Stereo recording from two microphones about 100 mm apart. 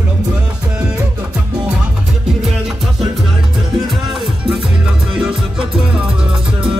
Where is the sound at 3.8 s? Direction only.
5° right (ahead or behind).